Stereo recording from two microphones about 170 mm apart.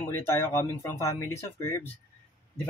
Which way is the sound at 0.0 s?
15° left (ahead or behind).